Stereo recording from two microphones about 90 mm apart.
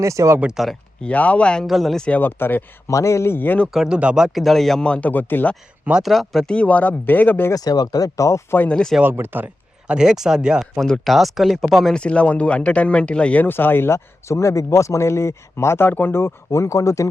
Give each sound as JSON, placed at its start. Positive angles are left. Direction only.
{"t": 0.0, "sound": "speech", "side_deg": -35}
{"t": 0.3, "sound": "speech", "side_deg": -10}
{"t": 1.0, "sound": "speech", "side_deg": 15}
{"t": 1.6, "sound": "speech", "side_deg": 0}
{"t": 2.0, "sound": "speech", "side_deg": 20}
{"t": 2.9, "sound": "speech", "side_deg": 35}
{"t": 3.7, "sound": "speech", "side_deg": -5}
{"t": 6.0, "sound": "speech", "side_deg": 0}
{"t": 7.5, "sound": "speech", "side_deg": 45}
{"t": 8.7, "sound": "speech", "side_deg": 5}
{"t": 9.0, "sound": "speech", "side_deg": -25}
{"t": 9.8, "sound": "speech", "side_deg": -10}
{"t": 10.8, "sound": "speech", "side_deg": 5}
{"t": 16.5, "sound": "speech", "side_deg": 35}